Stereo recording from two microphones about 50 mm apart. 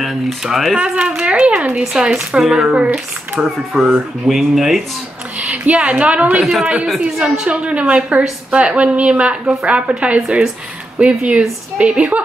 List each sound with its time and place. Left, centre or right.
0.0 s speech: centre
0.9 s a woman's voice: centre
2.4 s speech: centre
2.7 s a woman's voice: right
3.3 s speech: centre
5.4 s a woman's voice: right
7.2 s speech: centre
7.6 s a woman's voice: right